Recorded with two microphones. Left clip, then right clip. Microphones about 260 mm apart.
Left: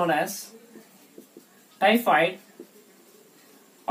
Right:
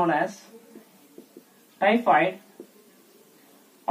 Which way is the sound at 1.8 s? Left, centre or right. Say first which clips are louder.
Even; centre.